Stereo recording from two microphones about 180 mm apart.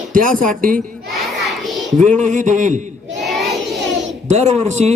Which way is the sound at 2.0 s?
45° right (ahead or behind).